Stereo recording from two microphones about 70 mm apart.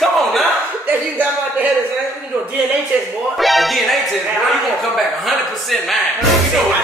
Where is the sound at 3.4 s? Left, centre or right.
Centre.